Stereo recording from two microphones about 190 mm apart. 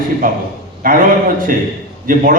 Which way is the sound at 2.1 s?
45° right (ahead or behind).